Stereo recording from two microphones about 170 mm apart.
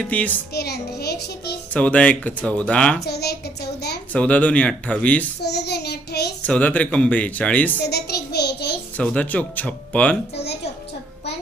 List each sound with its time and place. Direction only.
0.0 s speech: 10° left (ahead or behind)
0.5 s a child's voice: 70° left (ahead or behind)
1.7 s speech: 10° left (ahead or behind)
3.0 s a sound: 70° left (ahead or behind)
4.1 s speech: 10° left (ahead or behind)
5.4 s child singing: 75° left (ahead or behind)
6.4 s speech: 10° left (ahead or behind)
7.9 s a sound: 75° left (ahead or behind)
9.0 s speech: 10° left (ahead or behind)
10.4 s music: 75° left (ahead or behind)